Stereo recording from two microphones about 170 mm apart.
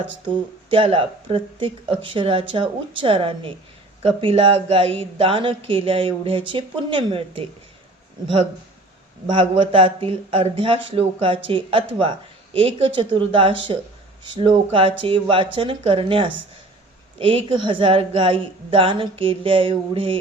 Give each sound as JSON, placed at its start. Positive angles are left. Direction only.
{"t": 0.7, "sound": "speech", "side_deg": -30}
{"t": 9.3, "sound": "speech", "side_deg": -30}